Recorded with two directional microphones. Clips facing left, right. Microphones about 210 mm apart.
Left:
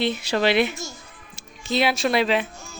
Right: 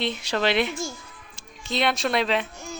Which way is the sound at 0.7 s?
30° right (ahead or behind).